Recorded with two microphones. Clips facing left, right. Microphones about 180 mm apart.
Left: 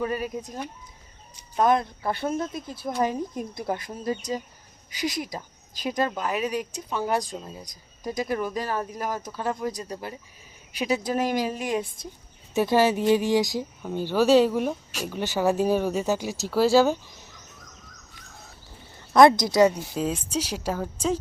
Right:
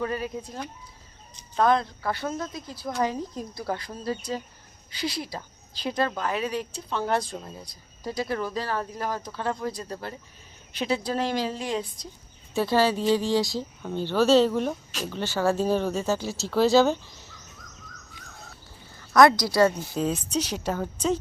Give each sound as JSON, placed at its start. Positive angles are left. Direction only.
{"t": 0.0, "sound": "speech", "side_deg": 15}
{"t": 18.9, "sound": "a woman's voice", "side_deg": 25}
{"t": 20.0, "sound": "speech", "side_deg": 5}